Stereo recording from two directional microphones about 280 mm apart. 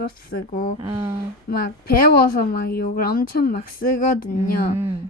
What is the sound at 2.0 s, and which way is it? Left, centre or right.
A woman's voice, left.